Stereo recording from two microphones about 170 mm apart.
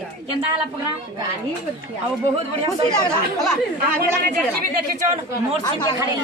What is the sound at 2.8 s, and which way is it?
Speech, 25° left (ahead or behind).